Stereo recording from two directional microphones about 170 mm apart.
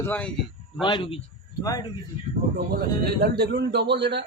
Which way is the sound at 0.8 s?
30° left (ahead or behind).